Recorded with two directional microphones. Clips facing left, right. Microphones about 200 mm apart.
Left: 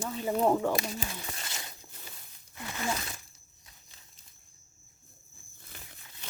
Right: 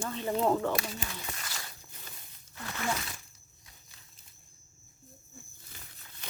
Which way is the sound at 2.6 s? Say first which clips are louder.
Left 1 dB; 15° left (ahead or behind).